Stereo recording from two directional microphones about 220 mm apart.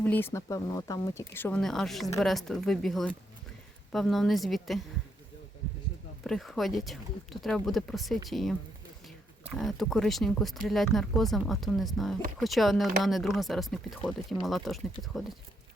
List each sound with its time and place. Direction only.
0.0 s speech: 5° left (ahead or behind)
6.2 s speech: centre (ahead or behind)
9.6 s speech: centre (ahead or behind)